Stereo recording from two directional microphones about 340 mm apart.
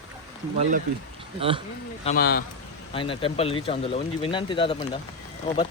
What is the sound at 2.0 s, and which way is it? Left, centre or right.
Speech, left.